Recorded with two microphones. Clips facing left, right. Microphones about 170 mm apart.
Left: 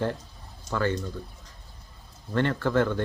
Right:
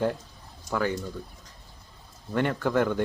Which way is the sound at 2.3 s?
15° right (ahead or behind).